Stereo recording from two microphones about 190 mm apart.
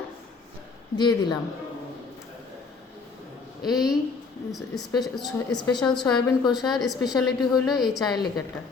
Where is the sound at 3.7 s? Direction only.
Centre (ahead or behind).